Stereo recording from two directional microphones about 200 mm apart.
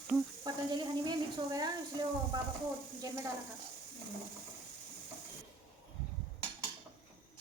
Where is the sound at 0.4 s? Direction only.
20° right (ahead or behind).